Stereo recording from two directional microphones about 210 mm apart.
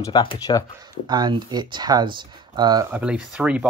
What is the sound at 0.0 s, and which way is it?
Speech, 20° left (ahead or behind).